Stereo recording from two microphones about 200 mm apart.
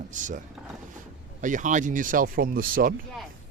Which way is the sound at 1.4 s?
40° right (ahead or behind).